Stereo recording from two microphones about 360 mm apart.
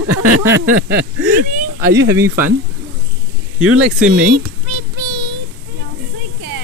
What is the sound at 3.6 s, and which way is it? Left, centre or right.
Speech, centre.